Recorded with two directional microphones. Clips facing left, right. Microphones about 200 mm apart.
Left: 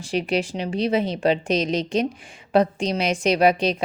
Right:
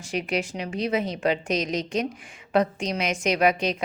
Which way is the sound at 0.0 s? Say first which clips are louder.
Left 4 dB; 30° left (ahead or behind).